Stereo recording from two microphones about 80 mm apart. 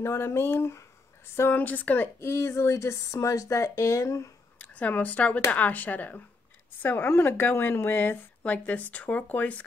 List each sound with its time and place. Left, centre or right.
0.0 s speech: left
1.5 s speech: centre
2.1 s speech: left
4.6 s speech: centre